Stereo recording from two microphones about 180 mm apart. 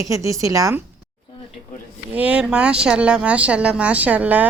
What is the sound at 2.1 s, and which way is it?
Speech, 10° right (ahead or behind).